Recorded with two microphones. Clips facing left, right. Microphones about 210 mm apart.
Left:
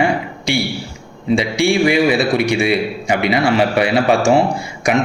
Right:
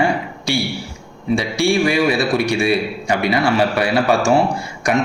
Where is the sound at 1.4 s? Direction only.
20° left (ahead or behind).